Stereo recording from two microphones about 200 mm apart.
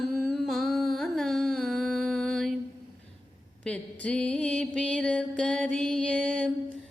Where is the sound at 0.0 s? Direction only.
Centre (ahead or behind).